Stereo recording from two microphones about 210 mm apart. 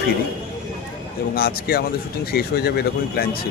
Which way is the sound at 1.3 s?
45° left (ahead or behind).